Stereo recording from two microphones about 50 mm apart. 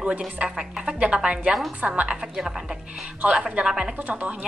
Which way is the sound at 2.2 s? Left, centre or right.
Centre.